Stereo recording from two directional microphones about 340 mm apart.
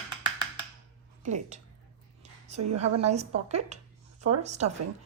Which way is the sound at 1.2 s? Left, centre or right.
Right.